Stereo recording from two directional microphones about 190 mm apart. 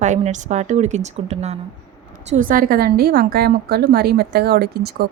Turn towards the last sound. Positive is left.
turn(degrees=-55)  # may be behind; listen again after turning